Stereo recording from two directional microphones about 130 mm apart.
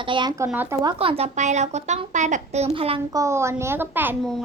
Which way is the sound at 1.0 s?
50° right (ahead or behind).